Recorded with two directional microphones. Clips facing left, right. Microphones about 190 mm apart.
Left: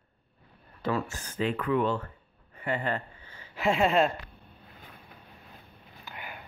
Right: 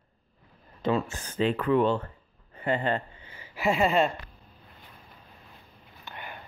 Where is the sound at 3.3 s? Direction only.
10° right (ahead or behind).